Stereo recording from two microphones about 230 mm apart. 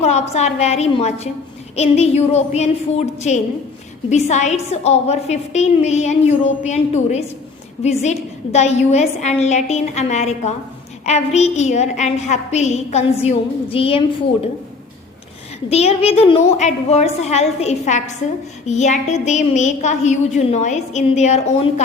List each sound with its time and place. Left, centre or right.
0.0 s a woman's voice: left
15.7 s a woman's voice: left